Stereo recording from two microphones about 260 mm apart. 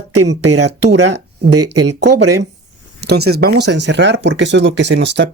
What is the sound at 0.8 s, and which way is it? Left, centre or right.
Speech, right.